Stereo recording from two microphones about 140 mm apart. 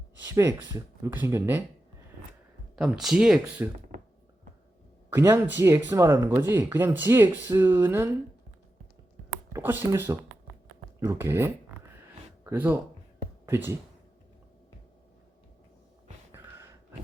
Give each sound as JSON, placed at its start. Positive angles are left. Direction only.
{"t": 0.3, "sound": "speech", "side_deg": -20}
{"t": 2.7, "sound": "speech", "side_deg": -5}
{"t": 5.1, "sound": "speech", "side_deg": -20}
{"t": 9.5, "sound": "speech", "side_deg": -15}
{"t": 16.3, "sound": "a sound", "side_deg": -20}